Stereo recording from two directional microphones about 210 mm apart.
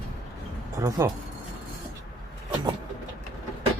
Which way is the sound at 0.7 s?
15° right (ahead or behind).